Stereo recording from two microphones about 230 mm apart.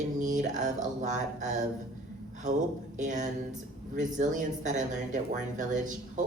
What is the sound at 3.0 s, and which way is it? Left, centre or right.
Speech, right.